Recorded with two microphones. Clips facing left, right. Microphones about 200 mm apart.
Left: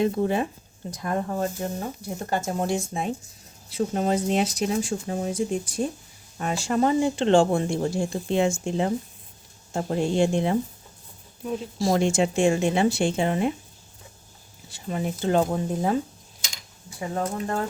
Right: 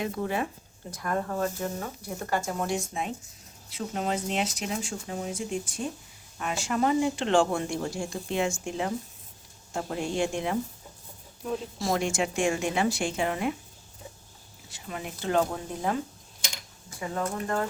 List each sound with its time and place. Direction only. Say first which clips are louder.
0.0 s speech: left 7 dB; 30° left (ahead or behind)
11.8 s speech: left 7 dB; 30° left (ahead or behind)
14.7 s speech: left 8 dB; 30° left (ahead or behind)
17.0 s speech: left 3 dB; 30° left (ahead or behind)